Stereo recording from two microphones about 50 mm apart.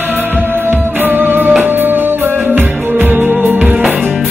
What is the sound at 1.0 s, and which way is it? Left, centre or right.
Music, right.